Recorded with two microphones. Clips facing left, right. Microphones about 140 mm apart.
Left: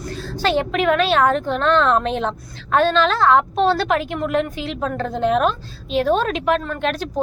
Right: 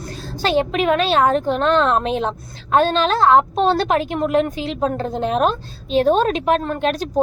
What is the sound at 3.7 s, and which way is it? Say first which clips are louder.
Speech: right 1 dB; 40° right (ahead or behind).